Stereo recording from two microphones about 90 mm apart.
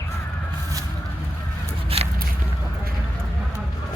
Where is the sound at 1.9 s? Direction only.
90° right.